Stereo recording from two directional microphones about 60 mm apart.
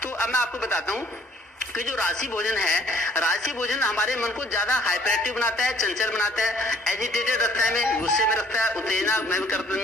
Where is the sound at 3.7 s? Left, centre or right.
Left.